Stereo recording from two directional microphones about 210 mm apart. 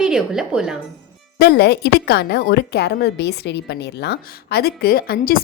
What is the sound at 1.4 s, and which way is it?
A woman's voice, 50° left (ahead or behind).